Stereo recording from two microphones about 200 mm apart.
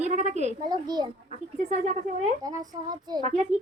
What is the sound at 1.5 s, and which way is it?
Speech, 35° right (ahead or behind).